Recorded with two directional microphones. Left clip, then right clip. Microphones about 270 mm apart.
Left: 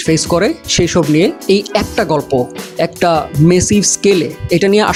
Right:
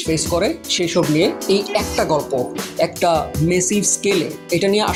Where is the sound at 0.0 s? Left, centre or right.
Left.